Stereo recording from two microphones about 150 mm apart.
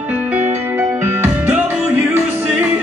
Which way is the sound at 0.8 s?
15° right (ahead or behind).